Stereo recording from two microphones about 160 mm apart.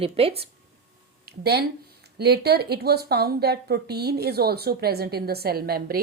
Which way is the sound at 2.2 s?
90° right.